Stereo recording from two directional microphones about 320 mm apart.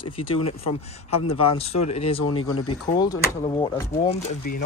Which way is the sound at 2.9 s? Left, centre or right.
Centre.